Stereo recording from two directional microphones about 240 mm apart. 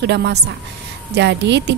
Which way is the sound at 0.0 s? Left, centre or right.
Right.